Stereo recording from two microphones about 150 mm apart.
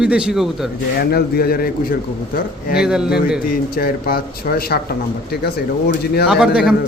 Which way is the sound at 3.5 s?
85° left.